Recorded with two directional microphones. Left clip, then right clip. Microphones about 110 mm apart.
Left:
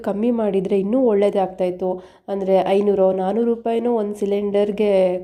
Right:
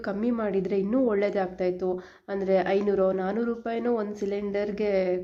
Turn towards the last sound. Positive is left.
turn(degrees=45)  # may be behind; listen again after turning